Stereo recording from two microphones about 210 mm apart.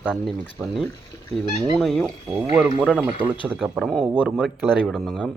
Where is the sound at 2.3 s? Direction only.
15° right (ahead or behind).